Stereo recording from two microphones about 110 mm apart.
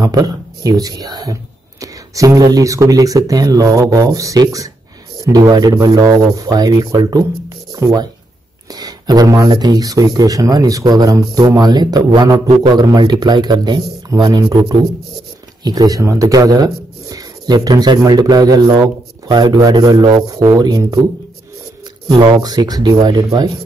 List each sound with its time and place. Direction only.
0.0 s a man's voice: 35° right (ahead or behind)
22.1 s speech: 40° right (ahead or behind)